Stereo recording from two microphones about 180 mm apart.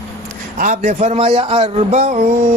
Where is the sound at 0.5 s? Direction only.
45° right (ahead or behind).